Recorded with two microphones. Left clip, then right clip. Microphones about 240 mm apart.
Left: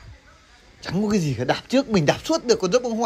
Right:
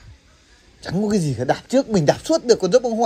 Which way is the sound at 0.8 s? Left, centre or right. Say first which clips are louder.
Right 2 dB; centre.